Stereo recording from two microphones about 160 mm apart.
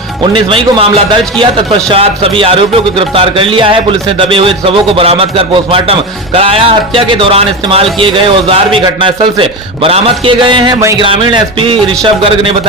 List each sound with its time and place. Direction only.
0.2 s speech: 30° right (ahead or behind)
11.0 s speech: 30° right (ahead or behind)